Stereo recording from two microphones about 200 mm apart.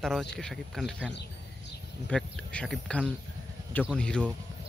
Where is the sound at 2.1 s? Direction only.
5° left (ahead or behind).